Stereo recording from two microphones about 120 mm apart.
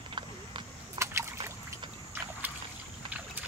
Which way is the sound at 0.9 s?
25° right (ahead or behind).